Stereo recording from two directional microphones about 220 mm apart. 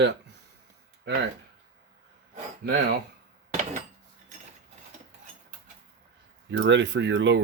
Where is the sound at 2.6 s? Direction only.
50° right (ahead or behind).